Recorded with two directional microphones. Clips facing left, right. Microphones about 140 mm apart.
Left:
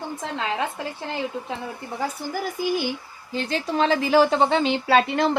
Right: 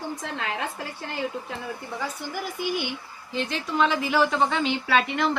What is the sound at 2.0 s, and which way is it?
A woman's voice, 40° left (ahead or behind).